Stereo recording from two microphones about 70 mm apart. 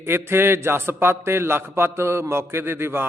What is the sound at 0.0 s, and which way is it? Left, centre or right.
A man's voice, right.